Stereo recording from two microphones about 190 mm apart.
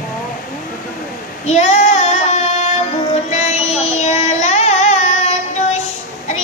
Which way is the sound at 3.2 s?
35° left (ahead or behind).